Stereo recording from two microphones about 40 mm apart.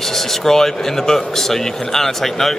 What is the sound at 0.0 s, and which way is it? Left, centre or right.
Speech, centre.